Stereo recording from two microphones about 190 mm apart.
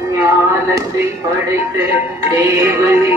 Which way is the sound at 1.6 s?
15° right (ahead or behind).